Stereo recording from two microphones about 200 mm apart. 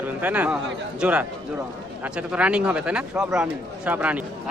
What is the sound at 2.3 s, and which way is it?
A man's voice, 5° right (ahead or behind).